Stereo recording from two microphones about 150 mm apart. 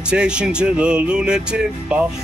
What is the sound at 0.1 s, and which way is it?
Speech, 5° right (ahead or behind).